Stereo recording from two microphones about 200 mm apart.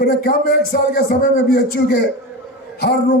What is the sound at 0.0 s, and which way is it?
Music, 45° left (ahead or behind).